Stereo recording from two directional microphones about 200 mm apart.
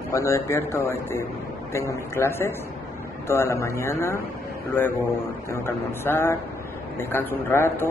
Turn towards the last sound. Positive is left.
turn(degrees=10)  # may be behind; listen again after turning